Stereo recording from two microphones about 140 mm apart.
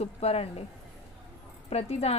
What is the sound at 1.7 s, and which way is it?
Speech, 50° left (ahead or behind).